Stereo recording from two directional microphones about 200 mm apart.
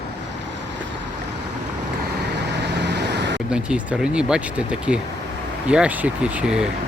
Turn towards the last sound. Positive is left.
turn(degrees=-5)  # may be behind; listen again after turning